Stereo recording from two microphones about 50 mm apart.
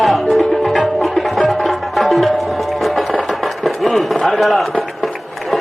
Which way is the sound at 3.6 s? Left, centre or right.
Centre.